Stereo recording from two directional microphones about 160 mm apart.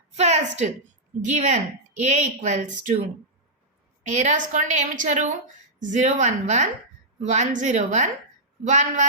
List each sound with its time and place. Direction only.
0.1 s a woman's voice: 45° right (ahead or behind)
4.0 s speech: 50° right (ahead or behind)